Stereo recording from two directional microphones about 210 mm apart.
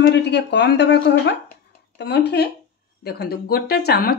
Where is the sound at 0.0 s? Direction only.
55° left (ahead or behind).